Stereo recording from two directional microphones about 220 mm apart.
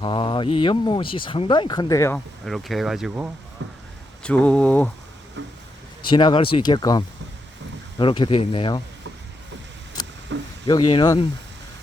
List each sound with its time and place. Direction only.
0.0 s speech: 20° left (ahead or behind)
2.4 s speech: centre (ahead or behind)
3.6 s a sound: 55° right (ahead or behind)
4.2 s speech: 5° left (ahead or behind)
5.4 s speech: 55° right (ahead or behind)
6.0 s speech: 20° left (ahead or behind)
10.3 s a sound: 55° right (ahead or behind)
10.7 s speech: 20° left (ahead or behind)